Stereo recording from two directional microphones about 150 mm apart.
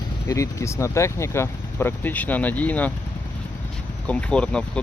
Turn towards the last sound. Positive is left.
turn(degrees=5)  # may be behind; listen again after turning